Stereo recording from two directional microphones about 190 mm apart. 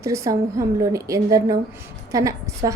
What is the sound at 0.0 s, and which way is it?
A woman's voice, 15° right (ahead or behind).